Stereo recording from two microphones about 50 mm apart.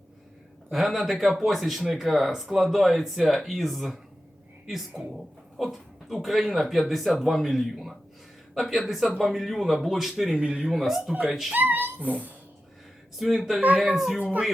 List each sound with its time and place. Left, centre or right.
0.7 s speech: centre
10.3 s speech: centre
10.7 s speech: centre
11.5 s speech: right
13.1 s speech: centre